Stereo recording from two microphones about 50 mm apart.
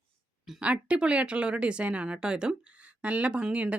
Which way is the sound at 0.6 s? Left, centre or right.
Right.